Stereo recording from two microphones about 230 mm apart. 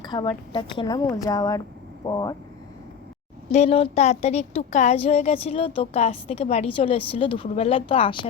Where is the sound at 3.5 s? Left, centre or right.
Left.